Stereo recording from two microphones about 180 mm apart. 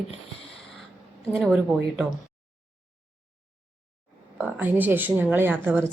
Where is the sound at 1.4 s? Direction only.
Centre (ahead or behind).